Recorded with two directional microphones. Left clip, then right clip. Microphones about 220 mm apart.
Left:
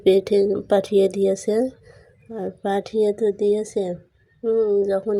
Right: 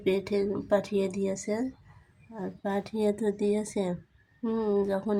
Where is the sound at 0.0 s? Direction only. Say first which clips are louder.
Left 11 dB; 20° left (ahead or behind).